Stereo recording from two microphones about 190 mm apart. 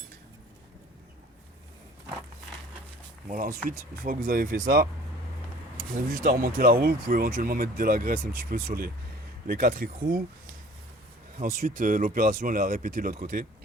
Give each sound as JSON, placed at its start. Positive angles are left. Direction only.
{"t": 3.2, "sound": "speech", "side_deg": -45}
{"t": 6.2, "sound": "speech", "side_deg": -50}
{"t": 11.3, "sound": "speech", "side_deg": -40}